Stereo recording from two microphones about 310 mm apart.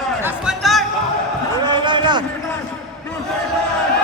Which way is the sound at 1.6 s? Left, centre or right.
Centre.